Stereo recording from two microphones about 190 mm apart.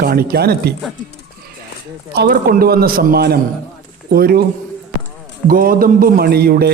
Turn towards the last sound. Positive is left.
turn(degrees=-55)  # may be behind; listen again after turning